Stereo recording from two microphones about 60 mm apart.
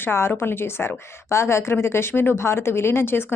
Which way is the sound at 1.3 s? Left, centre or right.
Left.